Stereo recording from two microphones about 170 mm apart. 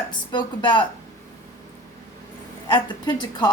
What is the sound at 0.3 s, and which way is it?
Speech, 25° left (ahead or behind).